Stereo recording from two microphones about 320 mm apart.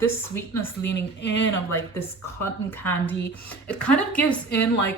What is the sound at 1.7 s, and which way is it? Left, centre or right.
A woman's voice, centre.